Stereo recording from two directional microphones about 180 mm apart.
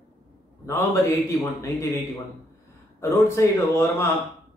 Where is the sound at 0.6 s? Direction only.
15° left (ahead or behind).